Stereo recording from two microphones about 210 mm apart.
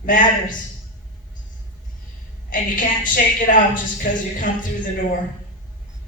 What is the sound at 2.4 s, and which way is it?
A woman's voice, 40° left (ahead or behind).